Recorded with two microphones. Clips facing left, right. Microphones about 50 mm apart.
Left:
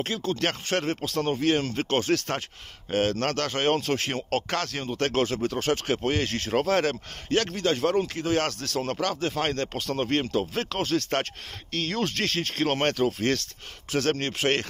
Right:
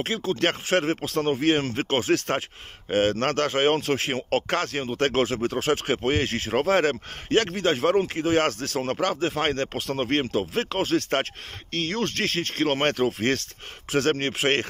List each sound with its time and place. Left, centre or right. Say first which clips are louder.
0.0 s speech: right 3 dB; centre
11.7 s speech: right 1 dB; centre
12.9 s speech: right 1 dB; right